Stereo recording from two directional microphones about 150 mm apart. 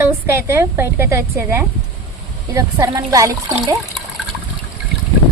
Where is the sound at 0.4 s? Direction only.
15° right (ahead or behind).